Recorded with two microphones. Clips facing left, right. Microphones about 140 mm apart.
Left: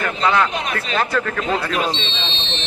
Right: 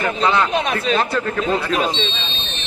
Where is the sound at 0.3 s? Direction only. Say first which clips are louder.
Even; 25° right (ahead or behind).